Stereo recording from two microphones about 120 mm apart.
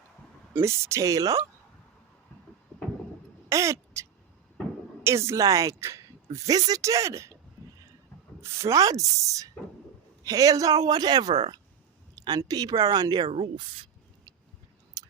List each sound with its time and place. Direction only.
0.5 s speech: 25° right (ahead or behind)
3.5 s speech: 25° right (ahead or behind)
5.0 s speech: 25° right (ahead or behind)
8.4 s speech: 25° right (ahead or behind)
13.2 s speech: 65° right (ahead or behind); by 13.8 s 50° right (ahead or behind)
15.0 s tick-tock: 35° right (ahead or behind)